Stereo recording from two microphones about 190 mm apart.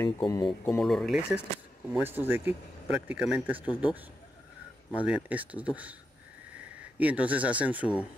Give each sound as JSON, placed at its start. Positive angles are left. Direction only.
{"t": 0.0, "sound": "speech", "side_deg": 20}
{"t": 0.5, "sound": "speech", "side_deg": 5}
{"t": 7.0, "sound": "speech", "side_deg": -5}